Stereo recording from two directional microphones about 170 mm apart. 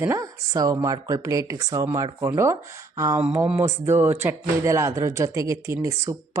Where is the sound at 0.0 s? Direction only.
20° right (ahead or behind).